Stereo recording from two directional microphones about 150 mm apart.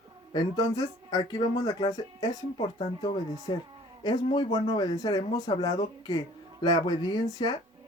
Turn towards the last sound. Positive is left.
turn(degrees=25)  # may be behind; listen again after turning